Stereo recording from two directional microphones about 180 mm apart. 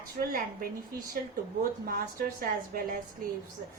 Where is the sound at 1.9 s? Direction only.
50° right (ahead or behind).